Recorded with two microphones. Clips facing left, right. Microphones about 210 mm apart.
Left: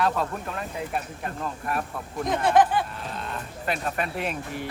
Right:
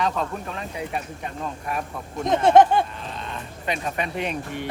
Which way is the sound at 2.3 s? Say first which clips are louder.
Right 5 dB; 25° right (ahead or behind).